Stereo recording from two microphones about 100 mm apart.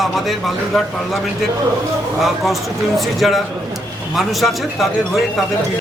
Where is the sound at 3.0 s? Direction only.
Centre (ahead or behind).